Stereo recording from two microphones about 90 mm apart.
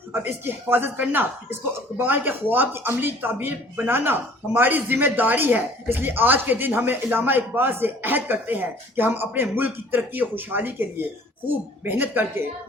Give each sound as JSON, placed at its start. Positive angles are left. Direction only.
{"t": 0.1, "sound": "speech", "side_deg": -25}